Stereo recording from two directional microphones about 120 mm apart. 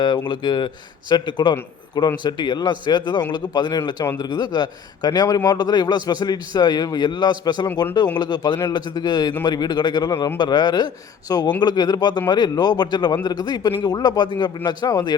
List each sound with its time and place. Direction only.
0.3 s a man's voice: 40° left (ahead or behind)